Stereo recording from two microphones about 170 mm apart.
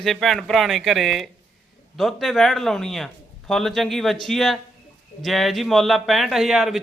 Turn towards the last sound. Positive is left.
turn(degrees=0)  # may be behind; listen again after turning